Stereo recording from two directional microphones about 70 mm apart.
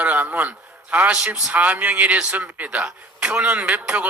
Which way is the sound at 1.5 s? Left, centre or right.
Right.